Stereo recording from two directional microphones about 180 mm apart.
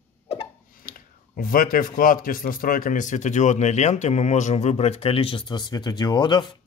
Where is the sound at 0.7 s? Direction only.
50° left (ahead or behind).